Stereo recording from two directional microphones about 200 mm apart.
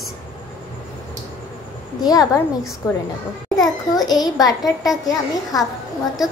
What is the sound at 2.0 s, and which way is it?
A woman's voice, 20° left (ahead or behind).